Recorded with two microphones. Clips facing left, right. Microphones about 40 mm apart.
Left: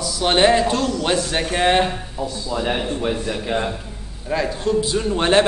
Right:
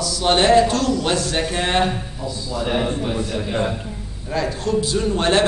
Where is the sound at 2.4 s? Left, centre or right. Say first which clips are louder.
Right 2 dB; left.